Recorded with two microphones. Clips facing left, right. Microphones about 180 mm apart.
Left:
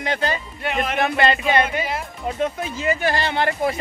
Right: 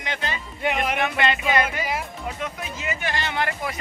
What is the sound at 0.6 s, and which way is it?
Speech, 15° right (ahead or behind).